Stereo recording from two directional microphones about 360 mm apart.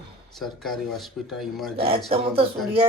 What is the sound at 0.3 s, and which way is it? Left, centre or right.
Speech, centre.